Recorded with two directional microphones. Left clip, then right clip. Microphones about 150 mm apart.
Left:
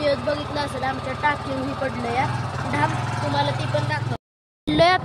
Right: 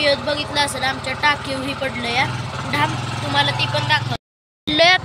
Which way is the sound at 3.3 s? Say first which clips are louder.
Right 6 dB; 5° left (ahead or behind).